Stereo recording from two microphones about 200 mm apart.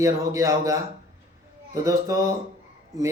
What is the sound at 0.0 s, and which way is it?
Speech, 15° right (ahead or behind).